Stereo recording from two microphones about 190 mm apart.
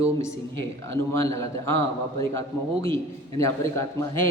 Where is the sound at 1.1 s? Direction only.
15° left (ahead or behind).